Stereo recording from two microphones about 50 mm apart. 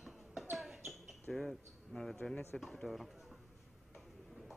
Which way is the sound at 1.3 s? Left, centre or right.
Centre.